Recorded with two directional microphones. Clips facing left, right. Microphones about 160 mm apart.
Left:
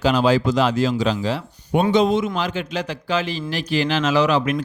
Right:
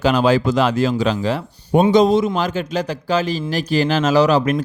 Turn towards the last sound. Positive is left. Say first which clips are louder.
# right 4 dB
turn(degrees=-40)  # may be behind; listen again after turning